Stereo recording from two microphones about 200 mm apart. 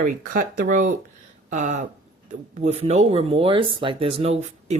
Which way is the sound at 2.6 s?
30° right (ahead or behind).